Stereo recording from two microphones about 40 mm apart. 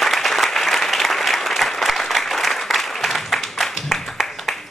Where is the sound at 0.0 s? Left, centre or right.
Centre.